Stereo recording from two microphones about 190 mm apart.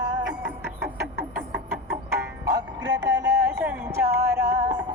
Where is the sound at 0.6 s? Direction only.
60° right (ahead or behind).